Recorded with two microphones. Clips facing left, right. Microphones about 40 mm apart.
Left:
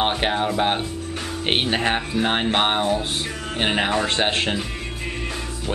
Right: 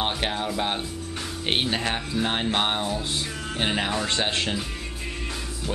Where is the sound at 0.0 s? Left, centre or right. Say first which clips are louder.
Left 5 dB; left.